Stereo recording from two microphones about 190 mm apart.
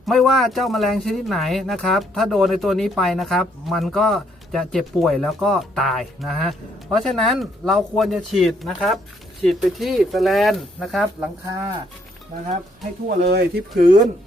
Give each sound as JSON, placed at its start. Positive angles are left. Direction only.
{"t": 0.0, "sound": "speech", "side_deg": 0}
{"t": 13.1, "sound": "speech", "side_deg": -55}